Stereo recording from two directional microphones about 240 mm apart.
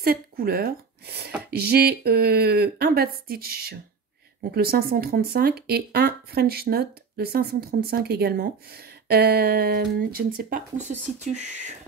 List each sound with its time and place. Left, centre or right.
0.0 s a woman's voice: right